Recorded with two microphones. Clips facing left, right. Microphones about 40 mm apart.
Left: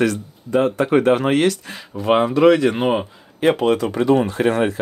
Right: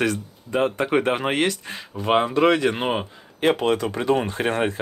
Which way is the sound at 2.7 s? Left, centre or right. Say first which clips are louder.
Left 5 dB; centre.